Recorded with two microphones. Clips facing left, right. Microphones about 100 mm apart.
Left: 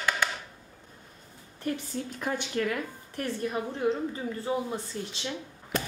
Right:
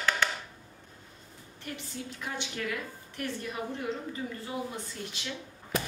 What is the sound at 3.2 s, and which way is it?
A woman's voice, 35° left (ahead or behind).